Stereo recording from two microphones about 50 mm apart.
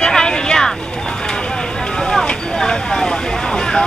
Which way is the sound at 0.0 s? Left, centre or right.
Centre.